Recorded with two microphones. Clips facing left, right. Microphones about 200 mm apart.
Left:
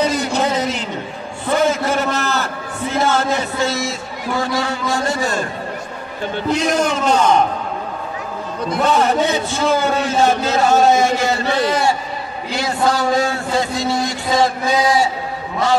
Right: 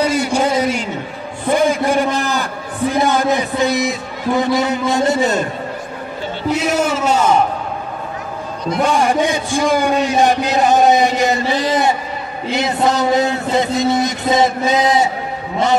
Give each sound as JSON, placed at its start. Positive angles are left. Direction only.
{"t": 0.0, "sound": "a sound", "side_deg": -10}
{"t": 6.5, "sound": "a man's voice", "side_deg": -5}
{"t": 8.7, "sound": "a man's voice", "side_deg": -10}